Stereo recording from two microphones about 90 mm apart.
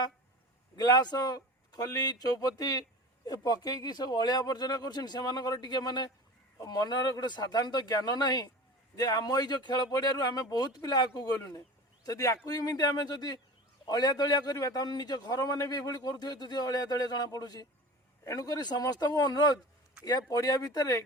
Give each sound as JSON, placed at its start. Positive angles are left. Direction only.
{"t": 0.8, "sound": "a man's voice", "side_deg": 45}